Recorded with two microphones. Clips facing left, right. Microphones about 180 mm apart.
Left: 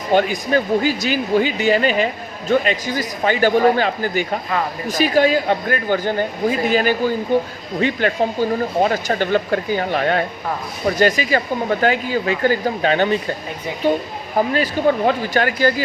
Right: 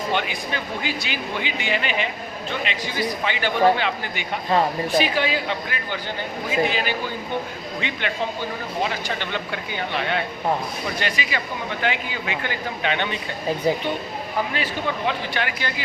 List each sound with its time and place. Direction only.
0.1 s speech: 40° left (ahead or behind)
14.3 s speech: 40° left (ahead or behind)